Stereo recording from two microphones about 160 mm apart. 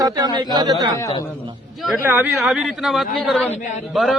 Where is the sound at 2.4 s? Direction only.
Centre (ahead or behind).